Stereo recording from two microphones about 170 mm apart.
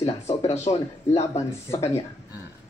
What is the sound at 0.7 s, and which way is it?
Speech, 30° left (ahead or behind).